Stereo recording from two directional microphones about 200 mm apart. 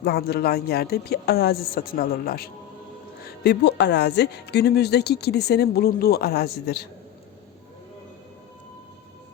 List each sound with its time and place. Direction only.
0.0 s speech: 55° left (ahead or behind)